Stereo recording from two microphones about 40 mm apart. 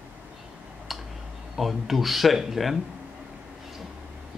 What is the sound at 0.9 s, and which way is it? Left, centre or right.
Tick-tock, centre.